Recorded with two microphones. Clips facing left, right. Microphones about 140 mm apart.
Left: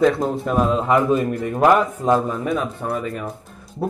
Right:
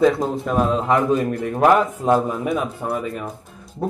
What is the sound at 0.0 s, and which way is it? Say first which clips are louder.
Speech: even; centre (ahead or behind).